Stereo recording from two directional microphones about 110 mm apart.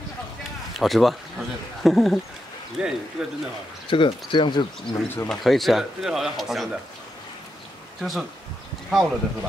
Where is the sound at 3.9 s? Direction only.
50° left (ahead or behind).